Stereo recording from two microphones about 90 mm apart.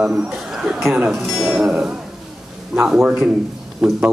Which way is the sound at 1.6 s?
15° right (ahead or behind).